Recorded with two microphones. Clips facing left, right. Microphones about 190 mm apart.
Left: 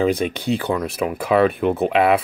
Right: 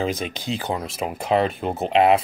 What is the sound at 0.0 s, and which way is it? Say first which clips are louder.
Speech: left 6 dB; 60° left (ahead or behind).